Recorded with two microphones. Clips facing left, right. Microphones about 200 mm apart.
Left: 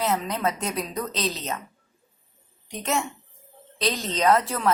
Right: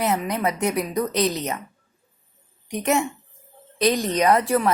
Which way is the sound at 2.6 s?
15° right (ahead or behind).